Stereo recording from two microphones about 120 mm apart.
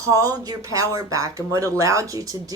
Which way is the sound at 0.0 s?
30° right (ahead or behind).